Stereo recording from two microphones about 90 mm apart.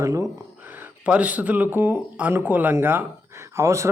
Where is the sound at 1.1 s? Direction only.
15° right (ahead or behind); by 3.9 s 30° right (ahead or behind).